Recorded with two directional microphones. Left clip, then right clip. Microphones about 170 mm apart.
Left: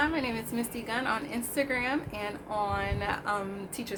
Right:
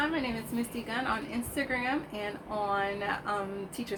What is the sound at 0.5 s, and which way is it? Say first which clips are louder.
A woman's voice: left 1 dB; 20° left (ahead or behind).